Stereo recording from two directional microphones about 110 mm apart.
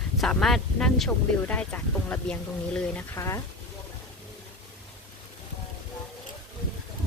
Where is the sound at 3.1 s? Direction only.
25° left (ahead or behind).